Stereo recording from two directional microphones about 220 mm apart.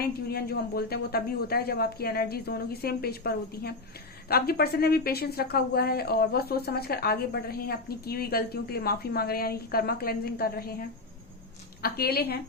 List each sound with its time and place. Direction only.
0.0 s speech: 45° left (ahead or behind)
11.8 s speech: 45° left (ahead or behind)